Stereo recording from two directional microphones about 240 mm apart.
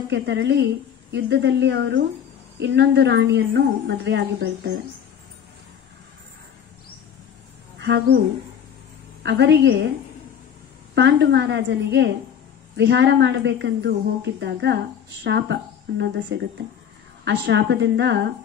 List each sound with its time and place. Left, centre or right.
0.1 s speech: right
7.8 s speech: right
9.2 s speech: right
11.0 s speech: right